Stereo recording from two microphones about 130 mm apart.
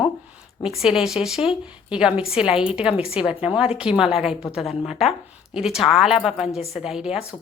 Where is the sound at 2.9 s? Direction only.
45° left (ahead or behind).